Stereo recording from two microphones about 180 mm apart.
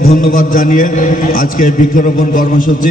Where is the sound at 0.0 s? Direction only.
50° left (ahead or behind).